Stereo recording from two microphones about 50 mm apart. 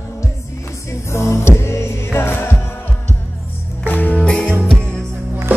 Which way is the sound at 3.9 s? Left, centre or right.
Left.